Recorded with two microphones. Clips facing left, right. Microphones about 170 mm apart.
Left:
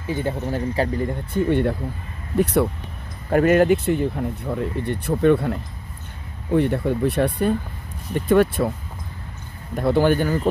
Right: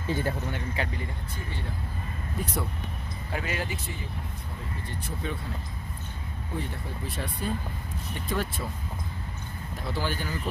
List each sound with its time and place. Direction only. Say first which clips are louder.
0.1 s speech: left 4 dB; 20° left (ahead or behind)
0.5 s speech: left 10 dB; 40° left (ahead or behind)
1.3 s speech: left 18 dB; 65° left (ahead or behind)
3.3 s speech: left 18 dB; 55° left (ahead or behind)
9.8 s speech: left 15 dB; 55° left (ahead or behind)